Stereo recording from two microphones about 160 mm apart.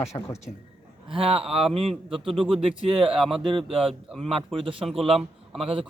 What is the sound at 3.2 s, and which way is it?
Speech, centre (ahead or behind).